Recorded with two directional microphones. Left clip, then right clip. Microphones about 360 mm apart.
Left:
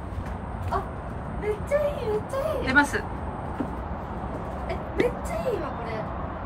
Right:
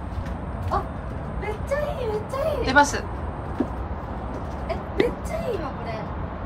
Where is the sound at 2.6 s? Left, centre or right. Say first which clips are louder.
Right 4 dB; centre.